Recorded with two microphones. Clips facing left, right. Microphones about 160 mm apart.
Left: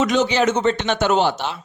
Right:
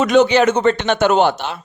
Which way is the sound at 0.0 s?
60° right (ahead or behind).